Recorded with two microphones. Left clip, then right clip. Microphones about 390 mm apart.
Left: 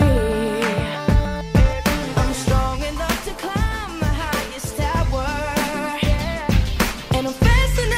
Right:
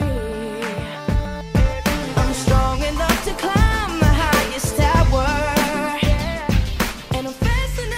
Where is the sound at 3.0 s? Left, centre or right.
Right.